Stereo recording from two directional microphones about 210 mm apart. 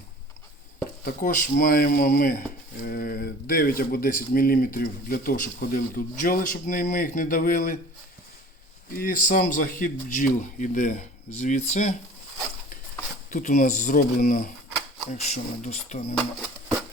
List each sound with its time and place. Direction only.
1.0 s speech: 40° left (ahead or behind)
8.9 s a man's voice: 40° left (ahead or behind)
13.3 s a man's voice: 40° left (ahead or behind)
15.1 s a man's voice: 35° left (ahead or behind)